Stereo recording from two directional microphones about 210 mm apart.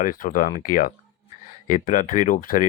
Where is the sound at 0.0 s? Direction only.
40° left (ahead or behind).